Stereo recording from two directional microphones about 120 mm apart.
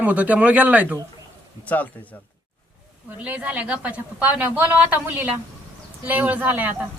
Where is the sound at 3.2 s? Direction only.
10° right (ahead or behind).